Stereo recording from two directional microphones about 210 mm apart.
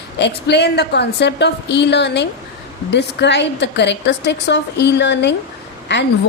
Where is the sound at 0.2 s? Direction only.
55° left (ahead or behind).